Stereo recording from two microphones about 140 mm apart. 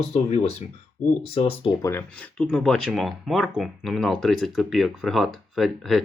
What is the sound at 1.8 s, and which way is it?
Speech, 15° left (ahead or behind).